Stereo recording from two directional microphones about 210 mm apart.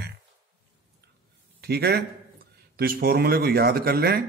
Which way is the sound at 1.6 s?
50° right (ahead or behind).